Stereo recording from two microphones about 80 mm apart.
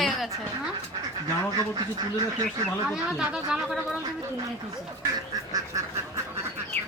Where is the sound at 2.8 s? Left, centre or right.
Centre.